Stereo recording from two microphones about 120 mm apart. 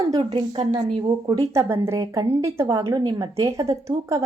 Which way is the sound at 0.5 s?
60° right (ahead or behind).